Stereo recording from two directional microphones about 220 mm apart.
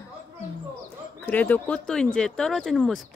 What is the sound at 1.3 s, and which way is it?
Speech, 5° left (ahead or behind).